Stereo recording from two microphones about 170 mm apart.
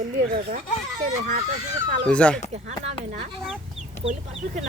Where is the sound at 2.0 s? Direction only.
5° left (ahead or behind).